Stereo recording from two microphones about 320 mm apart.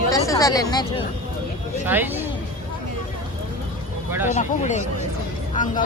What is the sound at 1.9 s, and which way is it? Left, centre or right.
Speech, centre.